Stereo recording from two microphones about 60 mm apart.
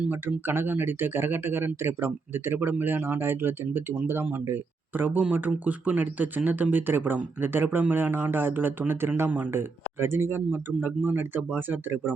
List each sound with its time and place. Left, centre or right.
0.1 s speech: right